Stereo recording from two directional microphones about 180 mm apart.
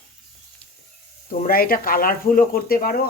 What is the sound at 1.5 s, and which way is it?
Speech, 55° left (ahead or behind).